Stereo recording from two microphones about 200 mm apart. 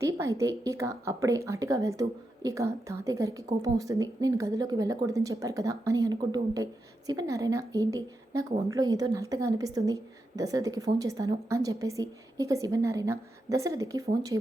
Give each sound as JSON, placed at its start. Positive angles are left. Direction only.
{"t": 0.0, "sound": "a woman's voice", "side_deg": -15}